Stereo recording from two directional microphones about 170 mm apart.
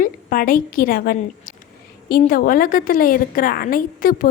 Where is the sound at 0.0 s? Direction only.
55° left (ahead or behind).